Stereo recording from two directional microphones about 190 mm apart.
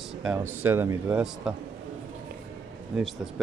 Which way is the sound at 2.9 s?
Centre (ahead or behind).